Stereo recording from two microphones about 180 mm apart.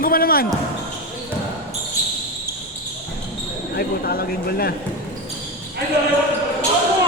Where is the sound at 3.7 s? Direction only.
55° left (ahead or behind).